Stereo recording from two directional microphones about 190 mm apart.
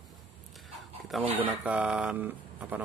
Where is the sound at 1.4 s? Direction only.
5° right (ahead or behind).